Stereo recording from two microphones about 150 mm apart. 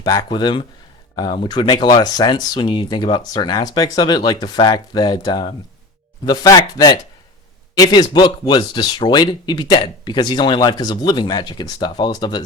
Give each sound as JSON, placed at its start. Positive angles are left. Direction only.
{"t": 0.0, "sound": "speech", "side_deg": 25}